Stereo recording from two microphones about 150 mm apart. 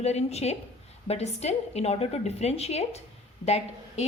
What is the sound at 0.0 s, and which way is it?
A woman's voice, 45° left (ahead or behind).